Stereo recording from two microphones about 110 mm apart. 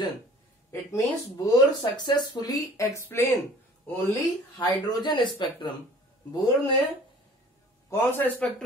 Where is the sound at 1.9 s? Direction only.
40° left (ahead or behind); by 3.4 s 25° left (ahead or behind).